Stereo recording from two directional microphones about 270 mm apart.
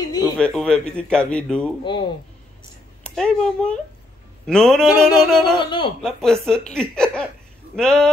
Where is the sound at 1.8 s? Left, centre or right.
Centre.